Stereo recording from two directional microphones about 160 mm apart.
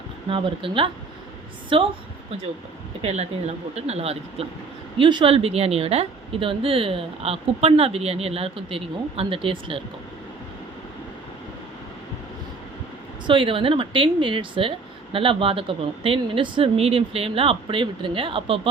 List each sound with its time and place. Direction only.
0.3 s a woman's voice: 35° right (ahead or behind)
3.0 s a woman's voice: 45° right (ahead or behind)
13.2 s a woman's voice: 35° right (ahead or behind)